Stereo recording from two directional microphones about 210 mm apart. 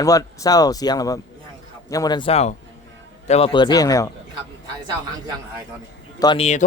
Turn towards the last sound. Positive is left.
turn(degrees=20)  # may be behind; listen again after turning